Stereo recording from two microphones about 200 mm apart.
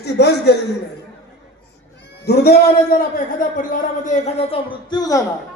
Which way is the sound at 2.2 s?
50° left (ahead or behind).